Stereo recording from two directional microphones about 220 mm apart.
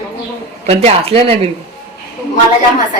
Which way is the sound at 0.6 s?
30° right (ahead or behind).